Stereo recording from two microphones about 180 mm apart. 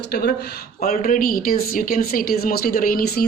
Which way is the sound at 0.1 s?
60° left (ahead or behind).